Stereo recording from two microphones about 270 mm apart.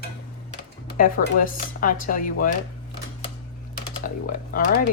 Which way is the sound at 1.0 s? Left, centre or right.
Left.